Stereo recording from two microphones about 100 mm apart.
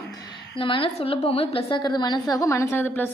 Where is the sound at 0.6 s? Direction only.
60° left (ahead or behind).